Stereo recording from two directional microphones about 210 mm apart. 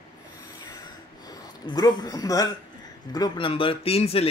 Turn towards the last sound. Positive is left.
turn(degrees=30)  # may be behind; listen again after turning